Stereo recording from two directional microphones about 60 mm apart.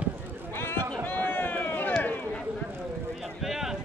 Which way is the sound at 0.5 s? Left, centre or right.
Left.